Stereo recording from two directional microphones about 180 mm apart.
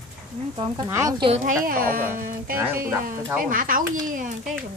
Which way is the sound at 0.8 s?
15° right (ahead or behind).